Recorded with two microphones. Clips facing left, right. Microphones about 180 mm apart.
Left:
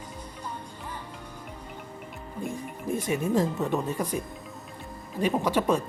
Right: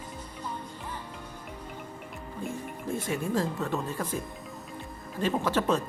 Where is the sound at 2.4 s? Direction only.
15° left (ahead or behind).